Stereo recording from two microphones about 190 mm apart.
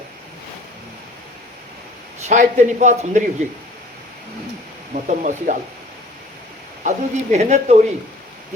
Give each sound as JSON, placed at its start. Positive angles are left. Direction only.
{"t": 2.2, "sound": "a man's voice", "side_deg": -40}
{"t": 5.0, "sound": "a man's voice", "side_deg": -40}
{"t": 6.8, "sound": "a man's voice", "side_deg": -40}